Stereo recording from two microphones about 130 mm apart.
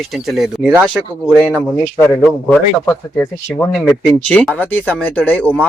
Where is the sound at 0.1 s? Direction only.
Centre (ahead or behind).